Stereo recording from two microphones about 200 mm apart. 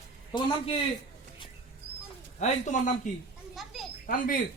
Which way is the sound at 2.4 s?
35° left (ahead or behind).